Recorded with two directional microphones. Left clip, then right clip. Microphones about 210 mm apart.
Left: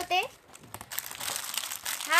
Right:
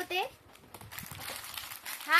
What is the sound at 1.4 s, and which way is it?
Crumpling, 50° left (ahead or behind).